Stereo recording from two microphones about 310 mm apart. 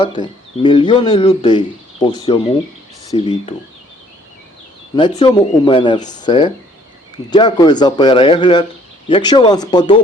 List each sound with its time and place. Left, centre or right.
0.0 s speech: centre
4.9 s speech: centre